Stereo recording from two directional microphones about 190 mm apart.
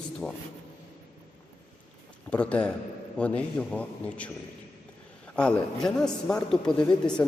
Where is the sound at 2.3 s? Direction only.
5° left (ahead or behind).